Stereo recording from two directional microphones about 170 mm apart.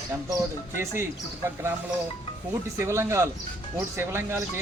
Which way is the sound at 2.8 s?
15° right (ahead or behind).